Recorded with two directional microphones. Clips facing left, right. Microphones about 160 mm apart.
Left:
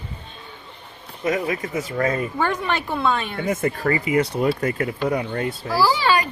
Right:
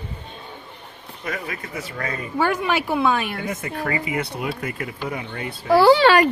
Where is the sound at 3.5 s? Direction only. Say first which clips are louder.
Left 5 dB; 45° left (ahead or behind).